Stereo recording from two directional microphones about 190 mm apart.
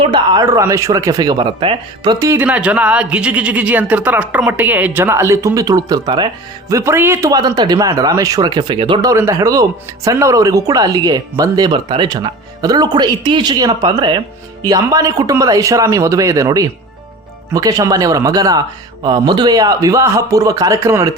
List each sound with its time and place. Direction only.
0.0 s speech: 25° right (ahead or behind)
2.1 s speech: 15° right (ahead or behind)